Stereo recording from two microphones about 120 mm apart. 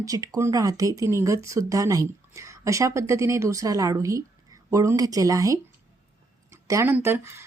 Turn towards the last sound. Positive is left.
turn(degrees=-20)  # may be behind; listen again after turning